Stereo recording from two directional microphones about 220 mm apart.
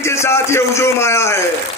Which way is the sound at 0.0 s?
10° left (ahead or behind).